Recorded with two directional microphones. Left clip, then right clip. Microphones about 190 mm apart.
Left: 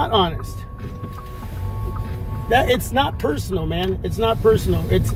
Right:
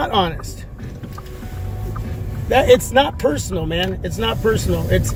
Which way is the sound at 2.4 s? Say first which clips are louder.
Right 5 dB; 25° right (ahead or behind).